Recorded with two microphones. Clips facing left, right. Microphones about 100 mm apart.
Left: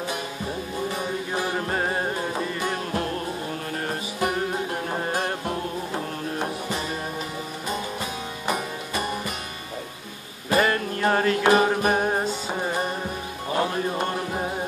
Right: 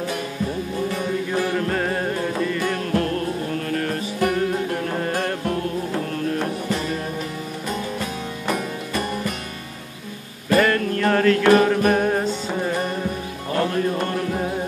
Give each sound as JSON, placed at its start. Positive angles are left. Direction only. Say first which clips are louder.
{"t": 0.7, "sound": "music", "louder": "right 4 dB", "side_deg": 10}
{"t": 10.5, "sound": "music", "louder": "right 4 dB", "side_deg": 15}